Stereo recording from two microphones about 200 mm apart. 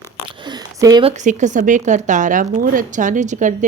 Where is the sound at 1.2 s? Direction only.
35° right (ahead or behind).